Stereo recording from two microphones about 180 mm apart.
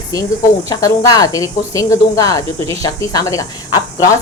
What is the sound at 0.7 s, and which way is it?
Speech, 20° left (ahead or behind).